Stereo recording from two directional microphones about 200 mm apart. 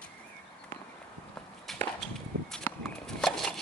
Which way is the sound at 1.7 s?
5° left (ahead or behind).